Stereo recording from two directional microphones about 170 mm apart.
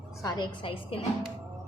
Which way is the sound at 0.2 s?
25° left (ahead or behind).